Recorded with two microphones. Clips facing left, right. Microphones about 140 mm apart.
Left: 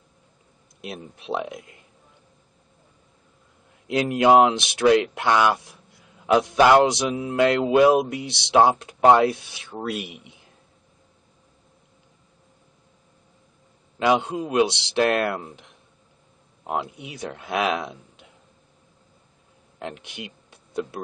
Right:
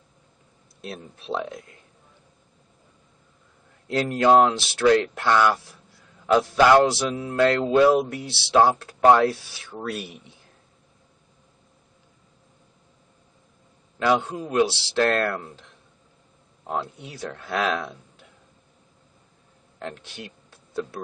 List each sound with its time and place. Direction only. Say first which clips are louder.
0.7 s speech: left 1 dB; 15° left (ahead or behind)
3.8 s speech: left 1 dB; 15° left (ahead or behind)
13.9 s speech: left 1 dB; 20° left (ahead or behind)
19.8 s speech: left 1 dB; 15° left (ahead or behind)